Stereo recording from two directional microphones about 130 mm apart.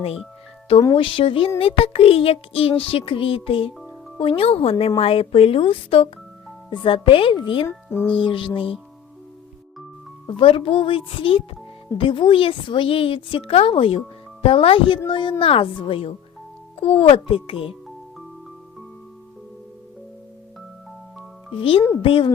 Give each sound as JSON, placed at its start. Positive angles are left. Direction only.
{"t": 0.9, "sound": "speech", "side_deg": 45}
{"t": 7.7, "sound": "speech", "side_deg": 20}
{"t": 8.1, "sound": "speech", "side_deg": 40}
{"t": 10.2, "sound": "speech", "side_deg": 40}
{"t": 21.5, "sound": "speech", "side_deg": 45}